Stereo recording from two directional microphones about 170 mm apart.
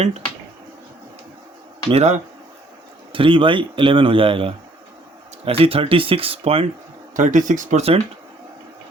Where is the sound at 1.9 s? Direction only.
40° right (ahead or behind).